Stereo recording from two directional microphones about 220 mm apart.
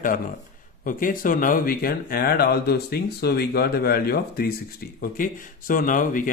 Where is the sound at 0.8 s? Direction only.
40° left (ahead or behind).